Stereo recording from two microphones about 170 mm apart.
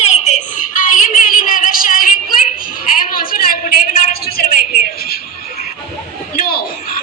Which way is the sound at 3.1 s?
55° left (ahead or behind).